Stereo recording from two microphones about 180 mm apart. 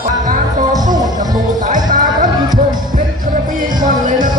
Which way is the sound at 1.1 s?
45° right (ahead or behind).